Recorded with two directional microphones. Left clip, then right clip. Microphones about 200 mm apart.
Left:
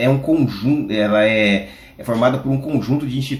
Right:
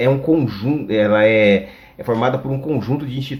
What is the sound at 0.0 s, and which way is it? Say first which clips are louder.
Speech: right 1 dB; 45° right (ahead or behind).